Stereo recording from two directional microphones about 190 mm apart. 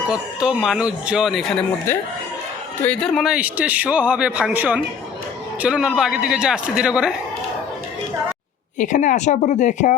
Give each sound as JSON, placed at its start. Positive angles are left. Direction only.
{"t": 0.1, "sound": "a man's voice", "side_deg": -5}
{"t": 8.8, "sound": "speech", "side_deg": 40}